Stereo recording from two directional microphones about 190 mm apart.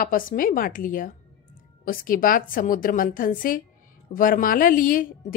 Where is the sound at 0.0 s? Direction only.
50° left (ahead or behind).